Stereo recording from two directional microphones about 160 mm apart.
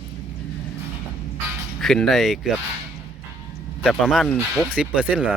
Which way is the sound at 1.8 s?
5° left (ahead or behind).